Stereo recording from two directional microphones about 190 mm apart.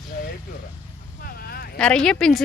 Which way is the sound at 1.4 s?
55° left (ahead or behind).